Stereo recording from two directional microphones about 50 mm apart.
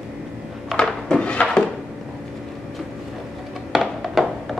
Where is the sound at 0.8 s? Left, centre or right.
Centre.